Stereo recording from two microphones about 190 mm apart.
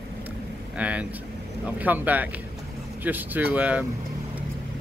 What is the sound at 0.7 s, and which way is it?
Speech, 5° right (ahead or behind).